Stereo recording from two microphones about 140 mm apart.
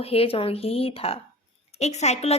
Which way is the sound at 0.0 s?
45° left (ahead or behind).